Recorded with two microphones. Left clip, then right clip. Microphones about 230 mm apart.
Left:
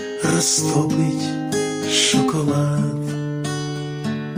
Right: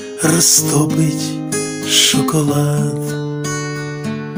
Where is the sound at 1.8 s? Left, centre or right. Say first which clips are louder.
Right 6 dB; right.